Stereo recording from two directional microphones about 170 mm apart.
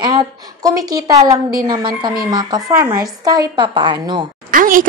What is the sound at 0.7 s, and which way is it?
A woman's voice, 20° right (ahead or behind).